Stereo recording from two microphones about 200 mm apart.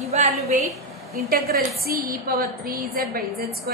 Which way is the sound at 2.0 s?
45° right (ahead or behind).